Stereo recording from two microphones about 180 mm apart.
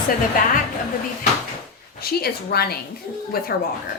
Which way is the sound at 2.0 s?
60° left (ahead or behind).